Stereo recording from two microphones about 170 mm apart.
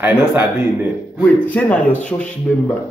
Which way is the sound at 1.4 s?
10° left (ahead or behind).